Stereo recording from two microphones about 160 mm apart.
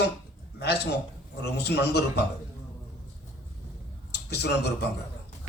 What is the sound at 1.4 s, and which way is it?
Speech, 90° left.